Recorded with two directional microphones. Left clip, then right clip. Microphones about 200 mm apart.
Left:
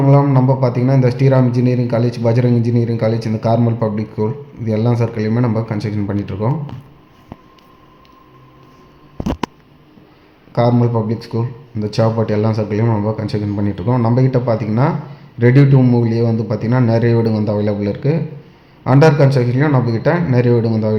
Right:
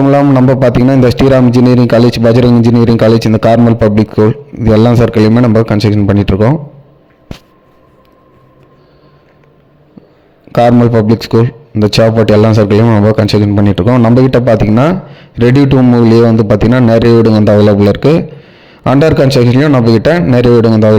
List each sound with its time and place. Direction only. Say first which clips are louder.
0.6 s a man's voice: right 9 dB; 45° right (ahead or behind)
10.5 s a man's voice: right 9 dB; 40° right (ahead or behind)